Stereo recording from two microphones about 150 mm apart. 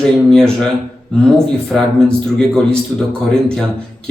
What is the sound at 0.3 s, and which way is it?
Speech, 5° left (ahead or behind).